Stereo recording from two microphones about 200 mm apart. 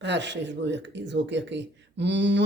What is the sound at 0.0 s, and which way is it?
Speech, 60° right (ahead or behind).